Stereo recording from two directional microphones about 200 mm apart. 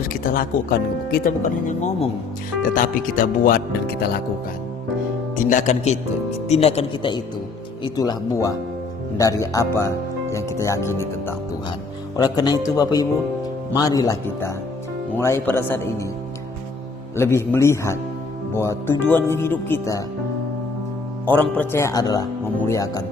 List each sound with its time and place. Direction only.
0.0 s speech: 45° left (ahead or behind)
5.4 s speech: 40° left (ahead or behind); by 11.0 s 15° left (ahead or behind)
12.1 s speech: 20° left (ahead or behind)
17.2 s speech: 10° left (ahead or behind)
21.2 s speech: 10° left (ahead or behind)